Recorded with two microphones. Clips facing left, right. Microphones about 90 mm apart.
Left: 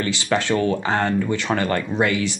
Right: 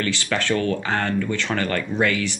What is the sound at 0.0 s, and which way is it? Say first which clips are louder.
Speech: left 2 dB; 20° left (ahead or behind).